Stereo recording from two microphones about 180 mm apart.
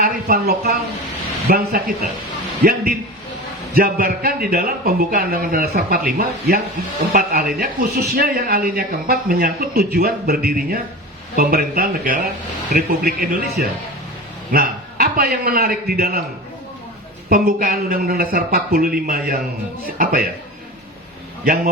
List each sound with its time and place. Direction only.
0.0 s a man's voice: 55° right (ahead or behind)
3.8 s a man's voice: 55° right (ahead or behind)
17.2 s a man's voice: 55° right (ahead or behind)
21.4 s a man's voice: 50° right (ahead or behind)